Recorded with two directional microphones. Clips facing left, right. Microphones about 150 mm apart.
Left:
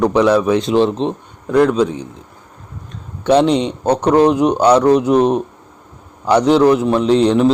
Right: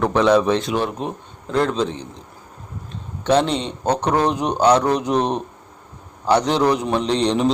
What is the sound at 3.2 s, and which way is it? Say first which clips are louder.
A man's voice: left 6 dB; 10° left (ahead or behind).